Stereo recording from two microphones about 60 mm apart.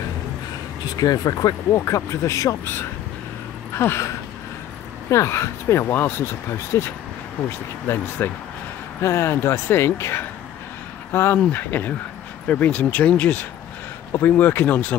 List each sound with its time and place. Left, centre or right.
0.9 s speech: left
2.6 s speech: left
5.1 s speech: left
5.9 s speech: left